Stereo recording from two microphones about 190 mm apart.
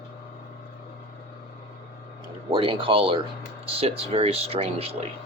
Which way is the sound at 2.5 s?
30° right (ahead or behind).